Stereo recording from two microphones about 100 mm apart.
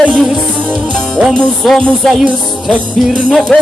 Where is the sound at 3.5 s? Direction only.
5° left (ahead or behind).